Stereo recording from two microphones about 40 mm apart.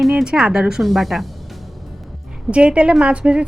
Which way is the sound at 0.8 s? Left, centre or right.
Centre.